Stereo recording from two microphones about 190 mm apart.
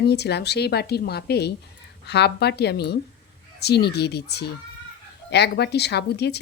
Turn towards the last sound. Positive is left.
turn(degrees=60)  # may be behind; listen again after turning